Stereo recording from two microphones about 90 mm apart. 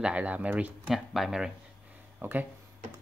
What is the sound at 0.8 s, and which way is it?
Speech, centre (ahead or behind).